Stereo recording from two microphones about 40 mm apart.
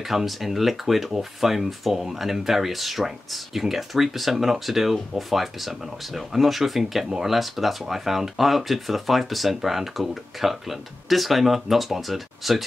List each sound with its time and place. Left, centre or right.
0.0 s speech: centre